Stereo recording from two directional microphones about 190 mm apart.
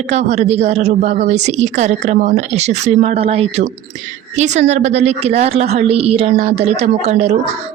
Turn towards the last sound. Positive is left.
turn(degrees=-35)  # may be behind; listen again after turning